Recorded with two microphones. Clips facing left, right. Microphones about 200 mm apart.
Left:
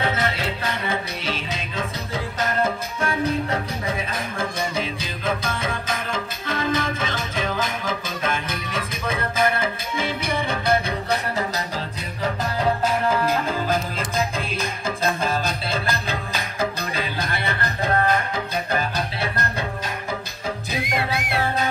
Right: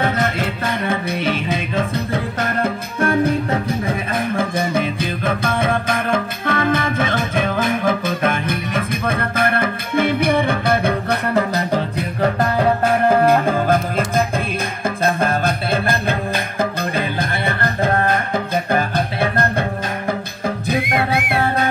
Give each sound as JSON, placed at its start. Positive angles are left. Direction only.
{"t": 0.0, "sound": "music", "side_deg": -50}
{"t": 20.6, "sound": "music", "side_deg": -55}